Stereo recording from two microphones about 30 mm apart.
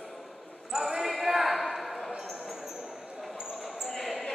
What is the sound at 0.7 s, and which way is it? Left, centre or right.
Basketball bounce, centre.